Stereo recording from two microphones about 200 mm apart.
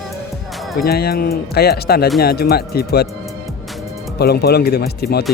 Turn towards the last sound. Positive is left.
turn(degrees=50)  # may be behind; listen again after turning